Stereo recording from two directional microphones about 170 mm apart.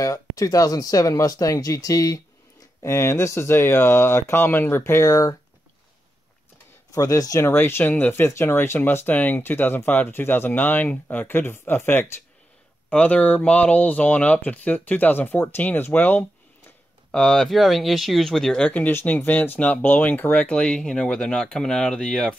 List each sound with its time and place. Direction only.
0.0 s speech: 20° left (ahead or behind)
6.9 s speech: 20° left (ahead or behind); by 22.3 s 5° left (ahead or behind)